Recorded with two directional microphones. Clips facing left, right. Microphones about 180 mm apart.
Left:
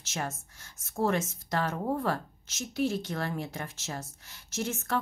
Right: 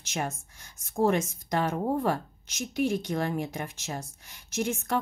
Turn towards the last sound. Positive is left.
turn(degrees=-15)  # may be behind; listen again after turning